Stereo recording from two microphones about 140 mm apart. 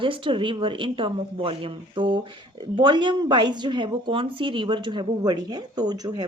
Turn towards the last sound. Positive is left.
turn(degrees=-30)  # may be behind; listen again after turning